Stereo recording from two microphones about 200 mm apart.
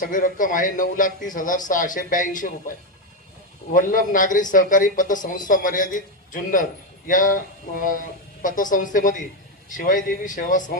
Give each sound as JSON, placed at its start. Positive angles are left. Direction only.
{"t": 0.0, "sound": "a man's voice", "side_deg": 40}
{"t": 3.8, "sound": "a man's voice", "side_deg": 40}